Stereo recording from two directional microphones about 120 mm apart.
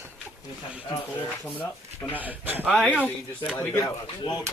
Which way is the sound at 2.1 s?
15° right (ahead or behind).